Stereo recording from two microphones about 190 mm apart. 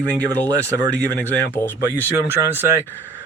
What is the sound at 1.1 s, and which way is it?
Speech, 10° left (ahead or behind).